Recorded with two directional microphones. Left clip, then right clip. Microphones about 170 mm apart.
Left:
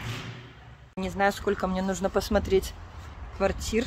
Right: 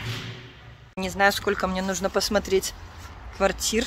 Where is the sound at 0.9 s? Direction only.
10° left (ahead or behind).